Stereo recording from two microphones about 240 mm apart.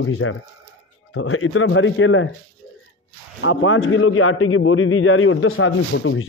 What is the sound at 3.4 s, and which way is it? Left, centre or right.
A man's voice, left.